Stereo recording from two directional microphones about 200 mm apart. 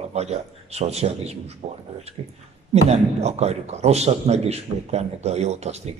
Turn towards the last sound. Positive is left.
turn(degrees=-35)  # may be behind; listen again after turning